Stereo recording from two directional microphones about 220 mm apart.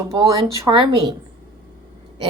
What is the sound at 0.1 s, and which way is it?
Speech, 15° right (ahead or behind).